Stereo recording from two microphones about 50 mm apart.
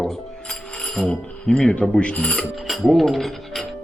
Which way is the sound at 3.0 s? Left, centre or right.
Centre.